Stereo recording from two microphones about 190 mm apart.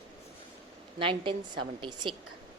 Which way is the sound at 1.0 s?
25° right (ahead or behind).